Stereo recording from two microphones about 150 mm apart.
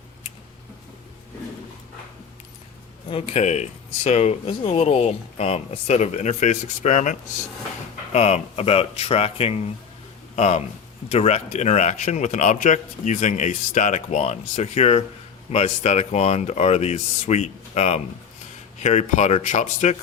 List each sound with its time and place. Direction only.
3.1 s speech: 45° left (ahead or behind)